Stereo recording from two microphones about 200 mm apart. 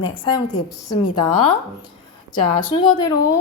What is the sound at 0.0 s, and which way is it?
Speech, 25° left (ahead or behind).